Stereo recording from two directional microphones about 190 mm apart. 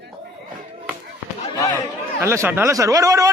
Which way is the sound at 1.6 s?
15° left (ahead or behind).